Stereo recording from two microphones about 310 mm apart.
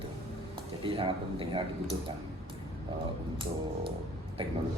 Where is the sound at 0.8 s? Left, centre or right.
Centre.